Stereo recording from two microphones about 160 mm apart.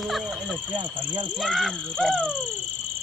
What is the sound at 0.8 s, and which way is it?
Speech, 30° right (ahead or behind).